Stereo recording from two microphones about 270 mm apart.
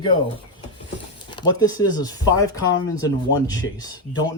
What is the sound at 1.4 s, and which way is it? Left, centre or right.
Speech, centre.